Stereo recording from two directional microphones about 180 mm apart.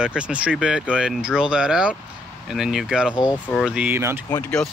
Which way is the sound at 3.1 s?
25° left (ahead or behind).